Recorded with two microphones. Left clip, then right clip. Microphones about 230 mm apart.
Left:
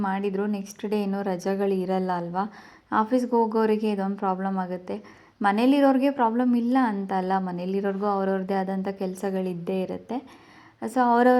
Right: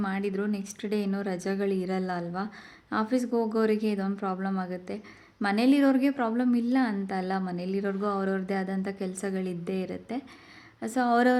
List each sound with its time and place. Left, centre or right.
0.0 s a woman's voice: centre